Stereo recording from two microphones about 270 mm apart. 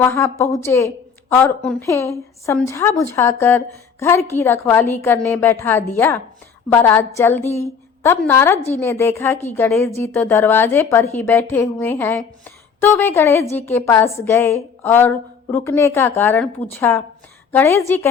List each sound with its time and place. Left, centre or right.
0.0 s a woman's voice: centre
8.5 s a woman's voice: left
8.8 s a woman's voice: centre